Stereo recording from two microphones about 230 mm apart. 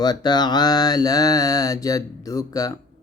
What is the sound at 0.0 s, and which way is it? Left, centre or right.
Mantra, centre.